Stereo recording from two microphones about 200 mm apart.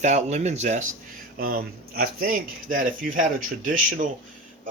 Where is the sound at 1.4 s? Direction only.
50° right (ahead or behind).